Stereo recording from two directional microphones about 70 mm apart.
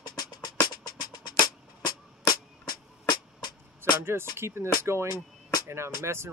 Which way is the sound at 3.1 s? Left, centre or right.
Left.